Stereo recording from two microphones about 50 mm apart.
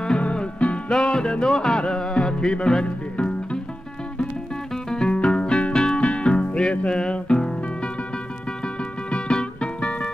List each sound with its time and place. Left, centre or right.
0.0 s music: centre
4.9 s music: centre
5.9 s music: left
9.1 s music: centre